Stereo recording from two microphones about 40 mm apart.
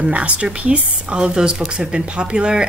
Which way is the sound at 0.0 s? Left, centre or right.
Right.